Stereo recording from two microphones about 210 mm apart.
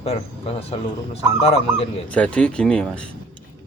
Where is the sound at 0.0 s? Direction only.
30° left (ahead or behind).